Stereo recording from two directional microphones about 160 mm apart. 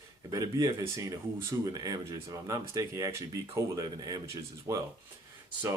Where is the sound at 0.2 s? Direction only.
20° right (ahead or behind).